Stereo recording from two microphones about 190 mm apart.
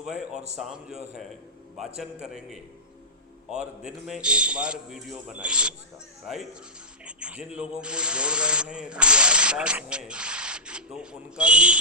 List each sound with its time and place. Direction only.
0.0 s a man's voice: 5° right (ahead or behind)
3.8 s a man's voice: 5° right (ahead or behind)